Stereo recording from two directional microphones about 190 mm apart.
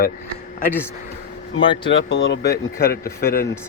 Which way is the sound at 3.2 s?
50° left (ahead or behind).